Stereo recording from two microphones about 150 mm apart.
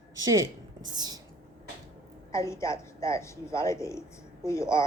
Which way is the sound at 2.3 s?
20° left (ahead or behind).